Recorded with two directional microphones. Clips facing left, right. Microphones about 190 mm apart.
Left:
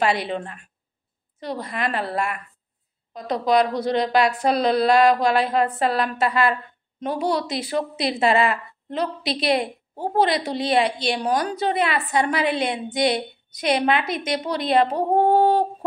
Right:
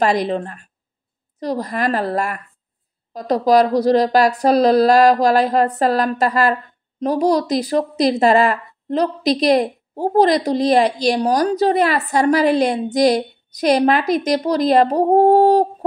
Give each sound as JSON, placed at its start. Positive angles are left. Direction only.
{"t": 0.0, "sound": "a woman's voice", "side_deg": -40}